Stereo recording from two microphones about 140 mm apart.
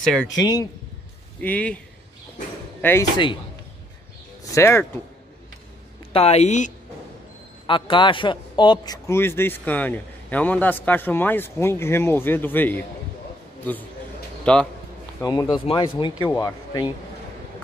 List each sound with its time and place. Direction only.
0.0 s speech: 5° left (ahead or behind)
0.4 s speech: 30° left (ahead or behind)
1.4 s a man's voice: 10° left (ahead or behind)
2.8 s a man's voice: 15° left (ahead or behind)
4.5 s speech: 20° left (ahead or behind)
6.1 s a woman's voice: 50° left (ahead or behind)
7.6 s a man's voice: 35° left (ahead or behind); by 12.8 s 15° left (ahead or behind)
14.4 s speech: 5° left (ahead or behind)
15.1 s speech: 25° left (ahead or behind)
15.6 s speech: 40° left (ahead or behind)